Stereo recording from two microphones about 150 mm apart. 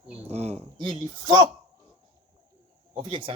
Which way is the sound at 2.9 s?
40° right (ahead or behind).